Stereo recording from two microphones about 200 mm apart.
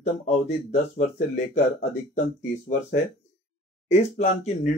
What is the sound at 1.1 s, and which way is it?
Speech, 35° left (ahead or behind).